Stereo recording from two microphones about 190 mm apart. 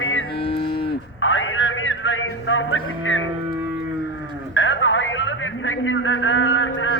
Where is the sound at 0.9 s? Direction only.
90° left.